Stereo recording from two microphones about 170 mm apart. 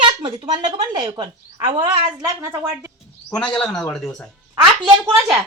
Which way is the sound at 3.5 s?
5° left (ahead or behind).